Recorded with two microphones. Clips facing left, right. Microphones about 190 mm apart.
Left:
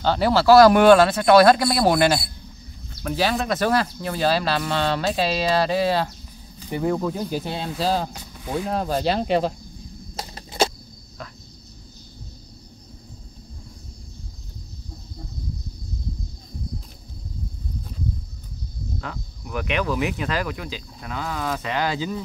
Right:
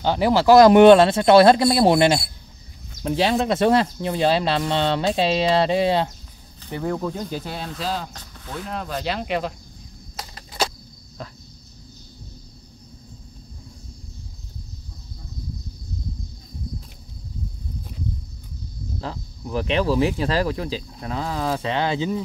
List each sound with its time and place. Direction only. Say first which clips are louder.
0.0 s speech: right 1 dB; 15° right (ahead or behind)
6.6 s speech: left 2 dB; 10° left (ahead or behind)
7.4 s speech: left 3 dB; 25° left (ahead or behind)
7.8 s speech: left 5 dB; 35° left (ahead or behind)
8.1 s speech: left 7 dB; 10° left (ahead or behind)
8.6 s speech: left 4 dB; 40° left (ahead or behind)
10.1 s a sound: left 5 dB; 25° left (ahead or behind)
18.9 s speech: right 4 dB; 30° right (ahead or behind)